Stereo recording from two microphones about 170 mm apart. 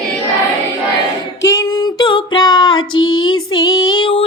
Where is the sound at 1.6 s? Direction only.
25° left (ahead or behind).